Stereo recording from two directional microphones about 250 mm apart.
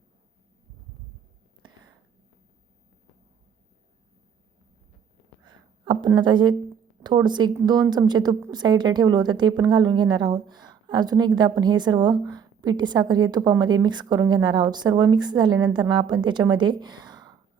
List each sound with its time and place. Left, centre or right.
5.5 s a woman's voice: centre